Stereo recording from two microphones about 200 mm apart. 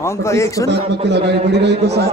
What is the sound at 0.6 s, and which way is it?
A man's voice, 60° right (ahead or behind).